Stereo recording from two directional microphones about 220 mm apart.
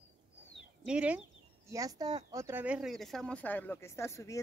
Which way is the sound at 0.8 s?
5° right (ahead or behind).